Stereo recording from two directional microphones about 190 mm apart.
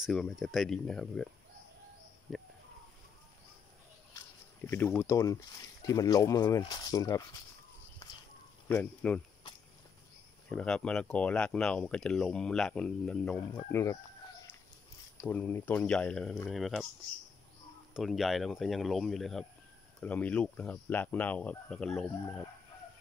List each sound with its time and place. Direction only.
0.0 s speech: centre (ahead or behind)
4.6 s speech: 10° left (ahead or behind)
8.6 s speech: 5° left (ahead or behind)
10.5 s speech: 5° left (ahead or behind)
15.1 s speech: 10° left (ahead or behind)
17.9 s speech: centre (ahead or behind)